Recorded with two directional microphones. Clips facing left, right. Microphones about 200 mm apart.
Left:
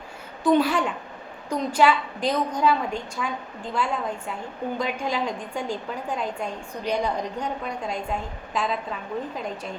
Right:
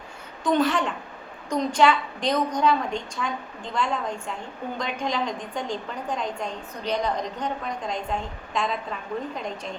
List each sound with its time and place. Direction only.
0.4 s a woman's voice: 10° left (ahead or behind)